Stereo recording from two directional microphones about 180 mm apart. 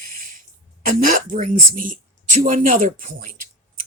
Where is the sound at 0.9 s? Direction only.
50° right (ahead or behind).